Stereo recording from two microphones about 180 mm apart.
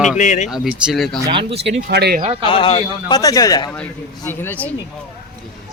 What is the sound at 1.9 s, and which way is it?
Speech, 60° right (ahead or behind).